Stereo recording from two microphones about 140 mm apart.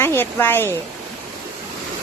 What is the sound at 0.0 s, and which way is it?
Speech, 15° left (ahead or behind).